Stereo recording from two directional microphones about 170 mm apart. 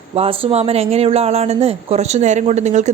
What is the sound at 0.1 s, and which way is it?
A woman's voice, 35° right (ahead or behind).